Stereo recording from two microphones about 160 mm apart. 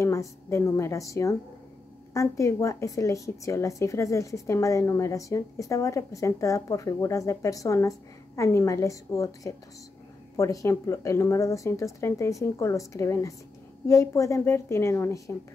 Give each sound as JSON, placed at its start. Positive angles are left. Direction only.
{"t": 0.0, "sound": "a woman's voice", "side_deg": 20}